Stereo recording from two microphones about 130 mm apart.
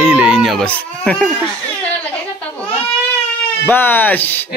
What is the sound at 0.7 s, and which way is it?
Speech, 10° left (ahead or behind).